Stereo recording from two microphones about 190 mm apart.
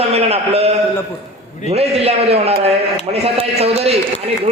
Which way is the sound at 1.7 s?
35° right (ahead or behind).